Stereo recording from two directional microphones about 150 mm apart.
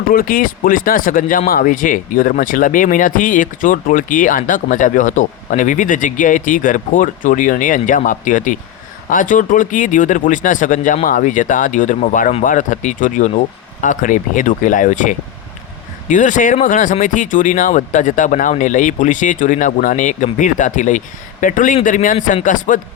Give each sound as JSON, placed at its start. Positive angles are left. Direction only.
{"t": 0.1, "sound": "speech", "side_deg": 70}